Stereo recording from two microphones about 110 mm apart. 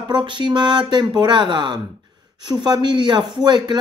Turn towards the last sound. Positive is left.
turn(degrees=-40)  # may be behind; listen again after turning